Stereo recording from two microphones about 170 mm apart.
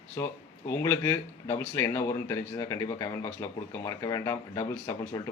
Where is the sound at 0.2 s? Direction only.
20° left (ahead or behind).